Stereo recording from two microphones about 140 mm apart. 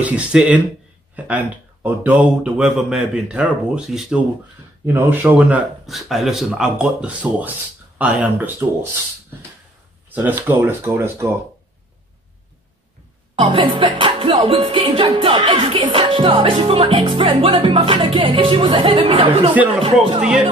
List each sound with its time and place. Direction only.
0.0 s a man's voice: 5° right (ahead or behind)
4.8 s speech: 15° right (ahead or behind)
10.0 s a sound: 15° right (ahead or behind)
10.5 s speech: 15° right (ahead or behind)
13.4 s music: 35° right (ahead or behind)
20.2 s a man's voice: 5° right (ahead or behind)